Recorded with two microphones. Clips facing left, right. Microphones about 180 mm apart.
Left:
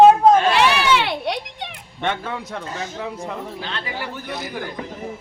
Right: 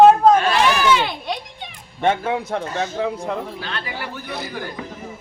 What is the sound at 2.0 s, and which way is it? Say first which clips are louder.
Speech: right 6 dB; 45° right (ahead or behind).